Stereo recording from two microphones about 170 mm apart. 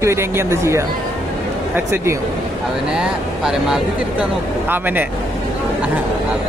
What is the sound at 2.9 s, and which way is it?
Speech, 5° right (ahead or behind).